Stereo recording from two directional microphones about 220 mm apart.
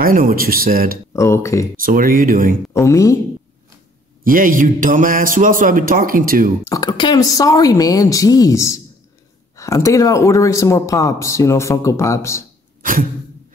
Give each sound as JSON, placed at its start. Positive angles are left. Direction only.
{"t": 0.0, "sound": "a man's voice", "side_deg": -40}
{"t": 1.1, "sound": "speech", "side_deg": 10}
{"t": 1.8, "sound": "a man's voice", "side_deg": -40}
{"t": 2.7, "sound": "speech", "side_deg": 15}
{"t": 4.2, "sound": "a man's voice", "side_deg": -40}
{"t": 6.7, "sound": "speech", "side_deg": 20}